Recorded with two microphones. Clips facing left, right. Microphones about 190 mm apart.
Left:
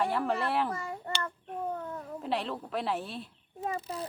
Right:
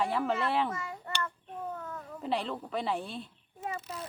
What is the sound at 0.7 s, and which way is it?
Child singing, 35° left (ahead or behind).